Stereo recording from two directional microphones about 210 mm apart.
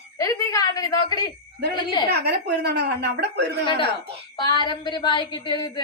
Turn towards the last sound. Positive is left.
turn(degrees=20)  # may be behind; listen again after turning